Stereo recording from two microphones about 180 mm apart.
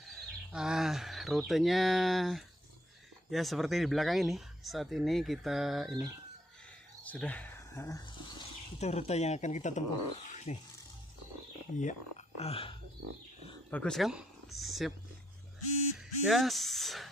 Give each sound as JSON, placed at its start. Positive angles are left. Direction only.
{"t": 0.5, "sound": "speech", "side_deg": -5}
{"t": 7.0, "sound": "a sound", "side_deg": 10}
{"t": 8.8, "sound": "speech", "side_deg": 35}
{"t": 11.8, "sound": "speech", "side_deg": 40}
{"t": 13.7, "sound": "speech", "side_deg": 5}
{"t": 16.0, "sound": "speech", "side_deg": 0}